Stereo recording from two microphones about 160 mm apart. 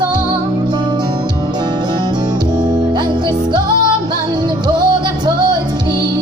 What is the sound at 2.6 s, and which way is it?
Music, 30° right (ahead or behind).